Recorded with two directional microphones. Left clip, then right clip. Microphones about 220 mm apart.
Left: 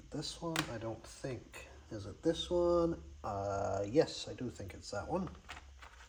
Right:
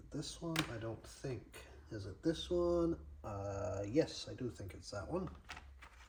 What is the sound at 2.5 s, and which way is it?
Speech, 20° left (ahead or behind).